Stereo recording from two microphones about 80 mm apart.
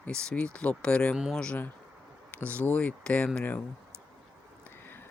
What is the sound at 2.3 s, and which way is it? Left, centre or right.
Speech, left.